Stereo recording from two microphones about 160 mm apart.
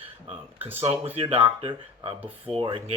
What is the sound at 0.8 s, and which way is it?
Speech, 40° right (ahead or behind).